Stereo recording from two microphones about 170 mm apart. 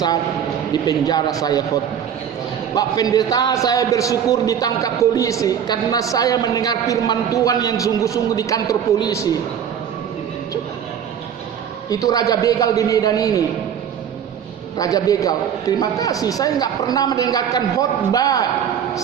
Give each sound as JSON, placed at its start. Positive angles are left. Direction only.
{"t": 0.7, "sound": "a man's voice", "side_deg": 20}
{"t": 11.9, "sound": "a man's voice", "side_deg": 20}
{"t": 14.8, "sound": "a man's voice", "side_deg": 20}